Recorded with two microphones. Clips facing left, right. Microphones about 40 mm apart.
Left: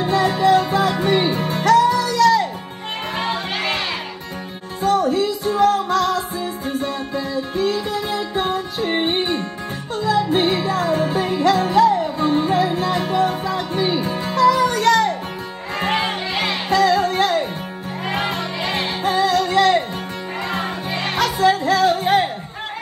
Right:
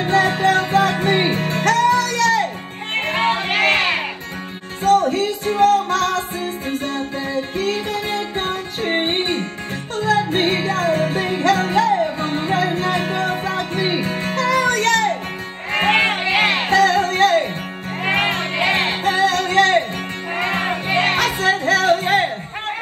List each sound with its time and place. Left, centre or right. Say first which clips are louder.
0.0 s music: right 1 dB; right